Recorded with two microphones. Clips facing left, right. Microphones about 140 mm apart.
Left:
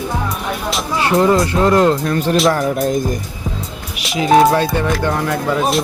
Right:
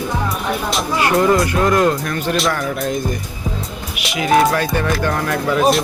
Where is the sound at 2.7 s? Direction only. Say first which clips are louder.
Left 4 dB; 40° left (ahead or behind).